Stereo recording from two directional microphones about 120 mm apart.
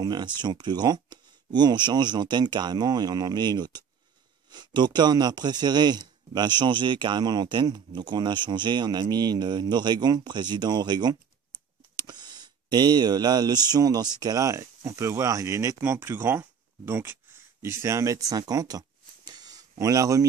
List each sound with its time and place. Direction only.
0.0 s speech: 35° right (ahead or behind)